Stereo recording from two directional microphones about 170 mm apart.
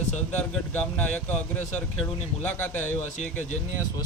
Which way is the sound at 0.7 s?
10° left (ahead or behind).